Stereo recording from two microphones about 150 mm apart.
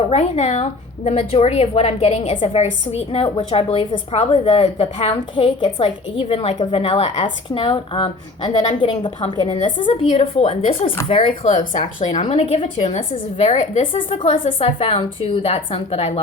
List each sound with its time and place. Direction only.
0.1 s a woman's voice: 45° left (ahead or behind)
9.7 s a woman's voice: 35° left (ahead or behind)
10.1 s a woman's voice: 45° left (ahead or behind)
13.9 s a woman's voice: 35° left (ahead or behind)